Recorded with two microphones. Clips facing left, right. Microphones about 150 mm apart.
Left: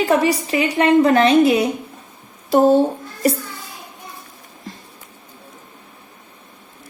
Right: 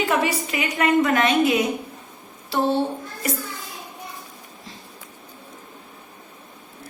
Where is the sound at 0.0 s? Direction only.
35° left (ahead or behind).